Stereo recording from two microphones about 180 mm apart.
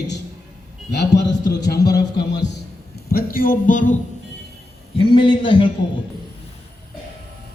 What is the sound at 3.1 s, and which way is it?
Speech, 50° left (ahead or behind).